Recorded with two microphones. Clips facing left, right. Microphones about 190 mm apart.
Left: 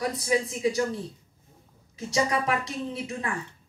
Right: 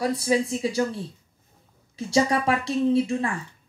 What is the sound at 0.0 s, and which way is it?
Speech, 30° right (ahead or behind).